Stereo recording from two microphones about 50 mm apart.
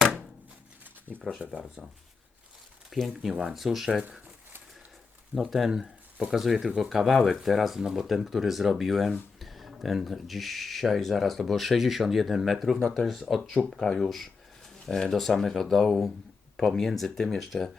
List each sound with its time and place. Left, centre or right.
1.1 s speech: centre
1.5 s speech: right
2.9 s speech: centre
5.3 s speech: centre